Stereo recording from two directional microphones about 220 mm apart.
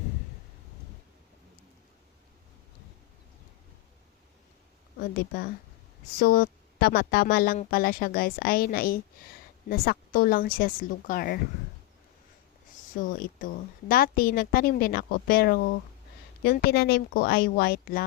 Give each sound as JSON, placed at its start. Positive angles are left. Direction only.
{"t": 4.9, "sound": "speech", "side_deg": 45}
{"t": 12.9, "sound": "speech", "side_deg": 40}